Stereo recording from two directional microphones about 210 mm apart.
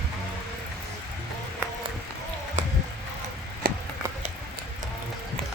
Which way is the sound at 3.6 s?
45° right (ahead or behind).